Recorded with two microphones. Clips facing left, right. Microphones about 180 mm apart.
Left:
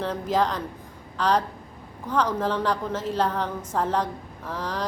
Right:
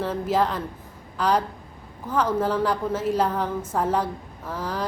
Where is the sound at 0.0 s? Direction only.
5° right (ahead or behind).